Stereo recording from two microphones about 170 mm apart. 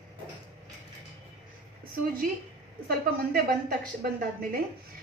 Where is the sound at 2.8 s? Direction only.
60° right (ahead or behind).